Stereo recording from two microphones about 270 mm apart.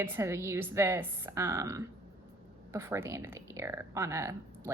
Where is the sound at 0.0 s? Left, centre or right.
Centre.